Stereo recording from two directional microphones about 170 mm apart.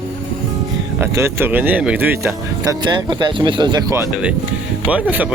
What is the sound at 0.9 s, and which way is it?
Speech, 15° right (ahead or behind).